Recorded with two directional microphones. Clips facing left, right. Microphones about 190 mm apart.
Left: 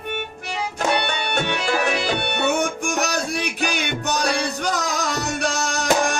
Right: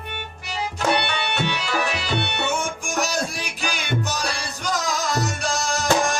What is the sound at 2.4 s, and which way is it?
Music, 65° left (ahead or behind).